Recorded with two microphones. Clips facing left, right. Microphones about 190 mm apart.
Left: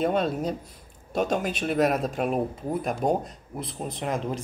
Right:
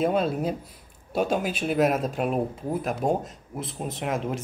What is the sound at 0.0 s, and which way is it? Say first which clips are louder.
Speech: right 1 dB; 5° right (ahead or behind).